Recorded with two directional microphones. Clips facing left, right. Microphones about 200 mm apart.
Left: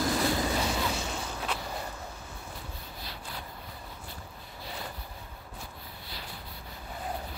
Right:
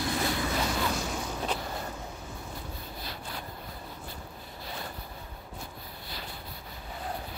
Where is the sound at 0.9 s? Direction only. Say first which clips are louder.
Right 2 dB; centre (ahead or behind).